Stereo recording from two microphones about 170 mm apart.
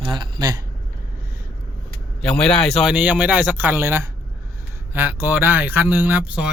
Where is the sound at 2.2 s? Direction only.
5° left (ahead or behind).